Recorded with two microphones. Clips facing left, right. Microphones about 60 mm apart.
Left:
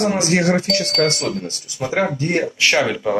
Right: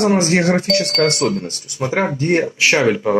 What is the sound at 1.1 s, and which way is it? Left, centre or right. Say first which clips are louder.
Speech: right 5 dB; centre.